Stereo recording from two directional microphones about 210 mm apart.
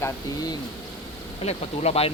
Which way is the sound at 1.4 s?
30° left (ahead or behind).